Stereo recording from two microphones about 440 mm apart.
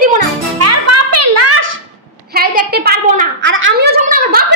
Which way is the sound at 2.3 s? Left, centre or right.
Right.